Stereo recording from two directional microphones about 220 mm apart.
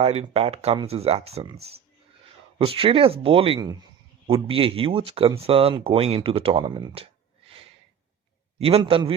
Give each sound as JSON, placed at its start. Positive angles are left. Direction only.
{"t": 0.0, "sound": "speech", "side_deg": -25}
{"t": 8.6, "sound": "speech", "side_deg": -25}